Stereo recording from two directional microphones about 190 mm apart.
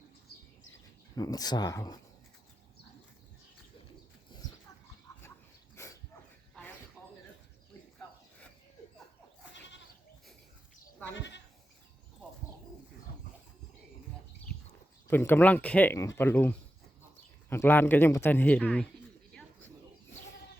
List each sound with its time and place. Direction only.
1.1 s speech: 20° left (ahead or behind)
5.1 s a sound: 20° left (ahead or behind)
5.7 s dog: 15° left (ahead or behind)
6.6 s a sound: 5° left (ahead or behind)
9.5 s goat: 70° left (ahead or behind)
11.1 s sheep: 70° left (ahead or behind)
15.0 s speech: 10° left (ahead or behind)
19.3 s bird: 5° left (ahead or behind)